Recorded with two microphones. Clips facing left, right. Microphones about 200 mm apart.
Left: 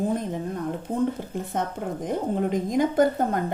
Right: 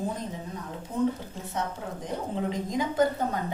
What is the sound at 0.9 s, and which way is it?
Speech, 55° left (ahead or behind).